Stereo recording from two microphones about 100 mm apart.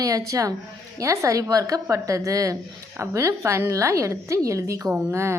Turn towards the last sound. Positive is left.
turn(degrees=-25)  # may be behind; listen again after turning